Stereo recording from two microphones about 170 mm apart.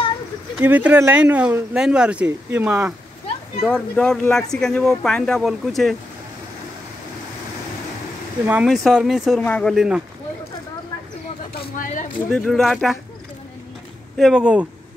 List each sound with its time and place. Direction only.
0.6 s speech: 10° right (ahead or behind)
3.7 s speech: 5° left (ahead or behind)
8.5 s speech: 5° right (ahead or behind)
11.8 s a sound: 50° left (ahead or behind)
12.3 s speech: 5° left (ahead or behind)
14.1 s speech: centre (ahead or behind)